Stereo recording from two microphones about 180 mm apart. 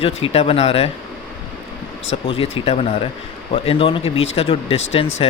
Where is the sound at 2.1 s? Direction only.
30° left (ahead or behind).